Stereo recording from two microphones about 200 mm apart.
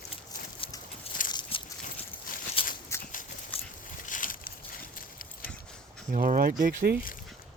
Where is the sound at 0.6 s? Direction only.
25° left (ahead or behind).